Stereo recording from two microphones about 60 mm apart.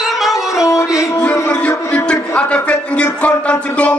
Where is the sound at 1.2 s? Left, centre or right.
Left.